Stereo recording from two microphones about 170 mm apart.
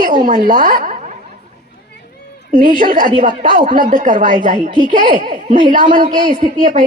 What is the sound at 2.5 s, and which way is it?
A woman's voice, 50° right (ahead or behind).